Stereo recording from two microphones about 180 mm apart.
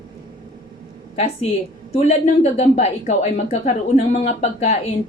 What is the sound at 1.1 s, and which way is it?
A woman's voice, 35° left (ahead or behind).